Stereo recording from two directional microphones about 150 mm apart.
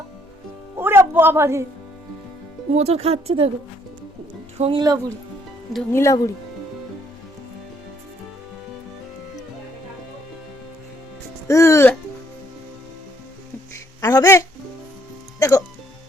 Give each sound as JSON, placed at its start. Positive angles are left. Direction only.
{"t": 0.8, "sound": "music", "side_deg": -15}
{"t": 2.7, "sound": "speech", "side_deg": -45}
{"t": 4.5, "sound": "speech", "side_deg": -40}
{"t": 4.8, "sound": "speech", "side_deg": -25}
{"t": 5.9, "sound": "speech", "side_deg": 20}
{"t": 11.4, "sound": "music", "side_deg": 20}
{"t": 14.0, "sound": "a sound", "side_deg": 25}
{"t": 15.4, "sound": "music", "side_deg": 25}